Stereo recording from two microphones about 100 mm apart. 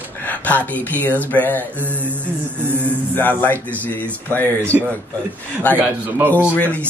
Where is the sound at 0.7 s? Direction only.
15° left (ahead or behind).